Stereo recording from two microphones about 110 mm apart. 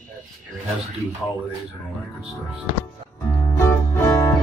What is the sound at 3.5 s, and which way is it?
Music, 25° left (ahead or behind).